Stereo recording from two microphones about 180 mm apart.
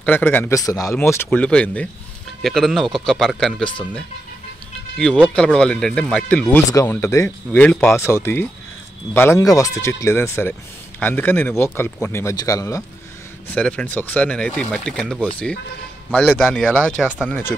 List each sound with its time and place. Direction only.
0.0 s speech: 10° left (ahead or behind)
13.5 s speech: 5° left (ahead or behind)